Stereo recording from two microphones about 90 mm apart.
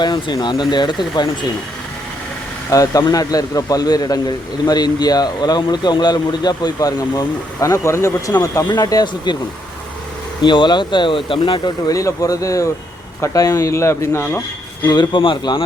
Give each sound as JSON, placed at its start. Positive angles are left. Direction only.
{"t": 0.0, "sound": "a man's voice", "side_deg": 55}
{"t": 2.6, "sound": "a man's voice", "side_deg": 40}
{"t": 10.4, "sound": "speech", "side_deg": 55}
{"t": 11.9, "sound": "speech", "side_deg": 40}
{"t": 14.8, "sound": "a man's voice", "side_deg": 50}
{"t": 15.2, "sound": "speech", "side_deg": 65}